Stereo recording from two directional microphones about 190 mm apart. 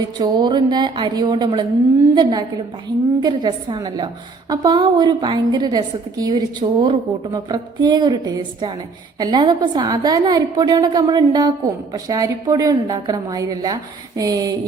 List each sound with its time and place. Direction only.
0.0 s a woman's voice: 20° right (ahead or behind)